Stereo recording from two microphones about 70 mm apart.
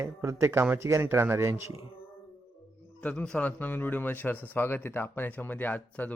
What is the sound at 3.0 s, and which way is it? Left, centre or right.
Speech, centre.